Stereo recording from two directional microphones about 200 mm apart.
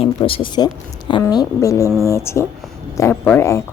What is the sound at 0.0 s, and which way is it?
A woman's voice, 25° left (ahead or behind).